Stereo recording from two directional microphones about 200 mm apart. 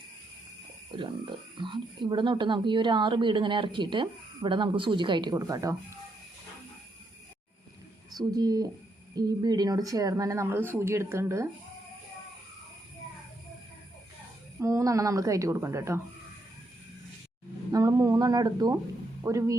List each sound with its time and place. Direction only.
0.9 s speech: 25° right (ahead or behind)
8.1 s speech: 20° right (ahead or behind)
14.6 s speech: 15° right (ahead or behind)
17.7 s speech: 15° right (ahead or behind)